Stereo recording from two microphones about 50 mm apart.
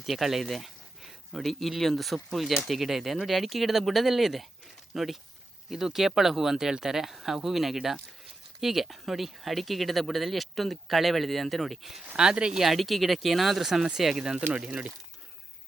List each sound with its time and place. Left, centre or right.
0.0 s speech: centre
12.1 s speech: centre